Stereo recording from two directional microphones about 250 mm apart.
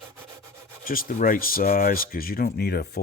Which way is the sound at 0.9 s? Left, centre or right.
Left.